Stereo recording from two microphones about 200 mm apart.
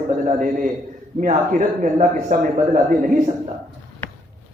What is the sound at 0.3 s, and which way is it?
A man's voice, 40° right (ahead or behind).